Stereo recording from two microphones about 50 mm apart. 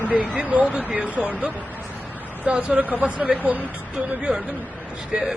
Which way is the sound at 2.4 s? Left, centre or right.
Right.